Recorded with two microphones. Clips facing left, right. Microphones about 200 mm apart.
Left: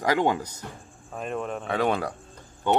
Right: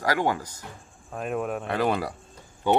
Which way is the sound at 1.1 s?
5° right (ahead or behind).